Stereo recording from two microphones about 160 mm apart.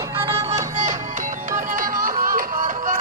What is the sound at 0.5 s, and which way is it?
Music, 50° right (ahead or behind).